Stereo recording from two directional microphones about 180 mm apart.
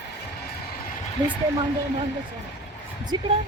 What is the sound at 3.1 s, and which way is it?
Speech, 25° right (ahead or behind).